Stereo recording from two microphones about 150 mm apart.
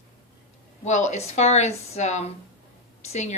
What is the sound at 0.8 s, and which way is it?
Speech, 50° left (ahead or behind).